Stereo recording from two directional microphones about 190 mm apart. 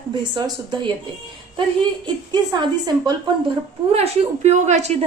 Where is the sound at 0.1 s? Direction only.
25° right (ahead or behind).